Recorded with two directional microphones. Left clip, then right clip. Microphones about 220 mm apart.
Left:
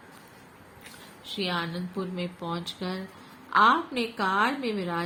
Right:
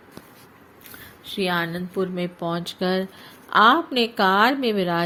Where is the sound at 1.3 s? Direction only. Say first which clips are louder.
Right 6 dB; 35° right (ahead or behind).